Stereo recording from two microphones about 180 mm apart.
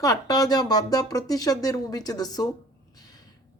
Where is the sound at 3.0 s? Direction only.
20° left (ahead or behind).